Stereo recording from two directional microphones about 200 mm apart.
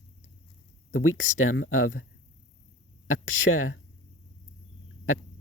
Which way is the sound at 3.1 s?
90° left.